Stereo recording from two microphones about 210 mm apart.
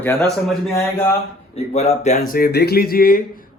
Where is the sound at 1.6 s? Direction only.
30° left (ahead or behind).